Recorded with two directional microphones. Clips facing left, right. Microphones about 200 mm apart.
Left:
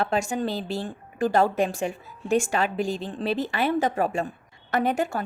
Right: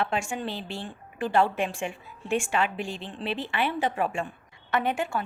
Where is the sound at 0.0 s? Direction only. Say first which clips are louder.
Left 4 dB; 40° left (ahead or behind).